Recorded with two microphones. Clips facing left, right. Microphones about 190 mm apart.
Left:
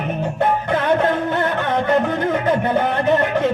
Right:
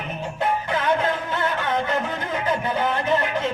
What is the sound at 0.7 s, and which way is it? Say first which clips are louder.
Music: left 5 dB; 60° left (ahead or behind).